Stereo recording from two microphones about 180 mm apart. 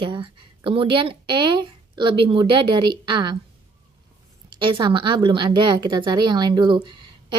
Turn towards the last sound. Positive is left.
turn(degrees=-25)  # may be behind; listen again after turning